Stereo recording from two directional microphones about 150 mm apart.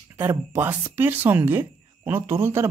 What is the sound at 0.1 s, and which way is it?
Speech, 15° right (ahead or behind).